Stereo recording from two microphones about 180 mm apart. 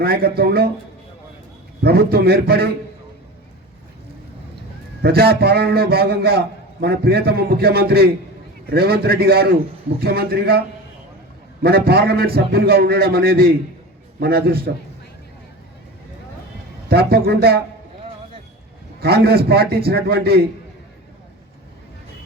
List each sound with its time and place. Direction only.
0.0 s a man's voice: 60° right (ahead or behind)
1.8 s a man's voice: 60° right (ahead or behind)
5.0 s a man's voice: 60° right (ahead or behind)
11.6 s a man's voice: 60° right (ahead or behind)
16.9 s a man's voice: 60° right (ahead or behind)
19.0 s a man's voice: 60° right (ahead or behind)